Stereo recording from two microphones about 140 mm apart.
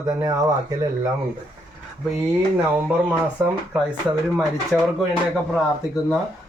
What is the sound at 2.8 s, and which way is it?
Speech, 15° right (ahead or behind).